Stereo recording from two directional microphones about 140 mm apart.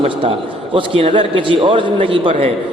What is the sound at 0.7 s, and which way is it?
A man's voice, 40° right (ahead or behind).